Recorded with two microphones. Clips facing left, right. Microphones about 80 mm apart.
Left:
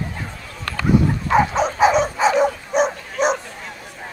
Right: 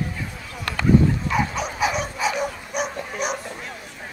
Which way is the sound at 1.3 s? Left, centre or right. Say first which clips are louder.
Left 7 dB; left.